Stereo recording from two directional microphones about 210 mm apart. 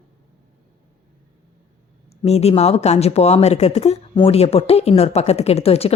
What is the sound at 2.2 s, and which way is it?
Speech, 30° left (ahead or behind).